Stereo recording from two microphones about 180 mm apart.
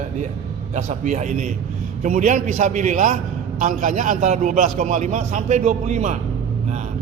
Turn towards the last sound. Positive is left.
turn(degrees=-40)  # may be behind; listen again after turning